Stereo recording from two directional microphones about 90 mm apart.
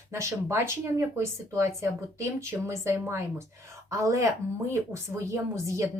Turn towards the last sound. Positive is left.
turn(degrees=-35)  # may be behind; listen again after turning